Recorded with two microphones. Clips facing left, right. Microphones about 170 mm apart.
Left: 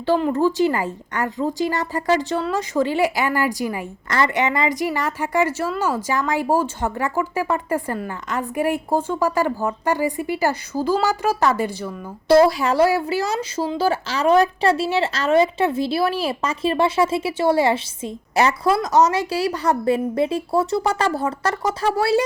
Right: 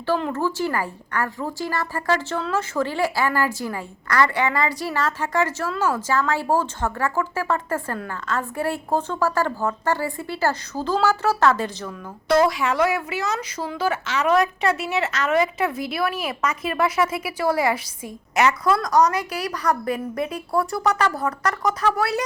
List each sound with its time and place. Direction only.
0.0 s speech: 15° left (ahead or behind)
12.3 s a woman's voice: 35° left (ahead or behind)